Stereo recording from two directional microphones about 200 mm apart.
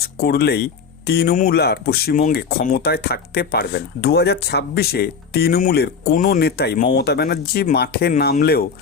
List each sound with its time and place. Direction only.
0.0 s speech: 50° left (ahead or behind)